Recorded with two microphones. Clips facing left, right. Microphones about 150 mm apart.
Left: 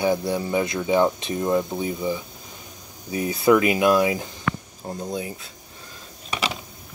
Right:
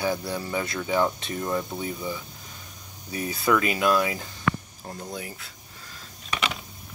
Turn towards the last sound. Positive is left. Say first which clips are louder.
# left 2 dB
turn(degrees=25)  # may be behind; listen again after turning